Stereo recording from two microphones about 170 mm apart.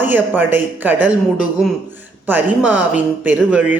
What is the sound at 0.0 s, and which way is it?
Speech, 10° right (ahead or behind).